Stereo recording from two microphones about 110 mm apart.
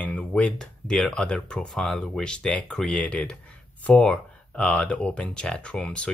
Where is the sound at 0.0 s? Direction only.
10° left (ahead or behind).